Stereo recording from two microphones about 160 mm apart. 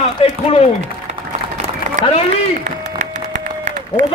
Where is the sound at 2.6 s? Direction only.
50° right (ahead or behind).